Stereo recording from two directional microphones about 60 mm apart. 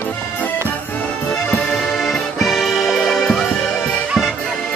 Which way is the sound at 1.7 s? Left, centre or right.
Centre.